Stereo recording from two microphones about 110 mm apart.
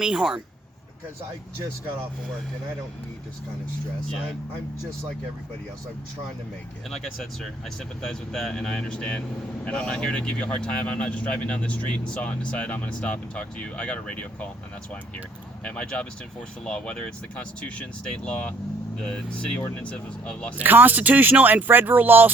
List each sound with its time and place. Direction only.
0.0 s speech: 5° right (ahead or behind)
6.9 s speech: 5° left (ahead or behind)
15.6 s speech: 10° left (ahead or behind)
20.6 s speech: 15° right (ahead or behind)